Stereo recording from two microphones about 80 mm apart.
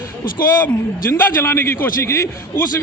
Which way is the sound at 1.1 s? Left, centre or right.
Left.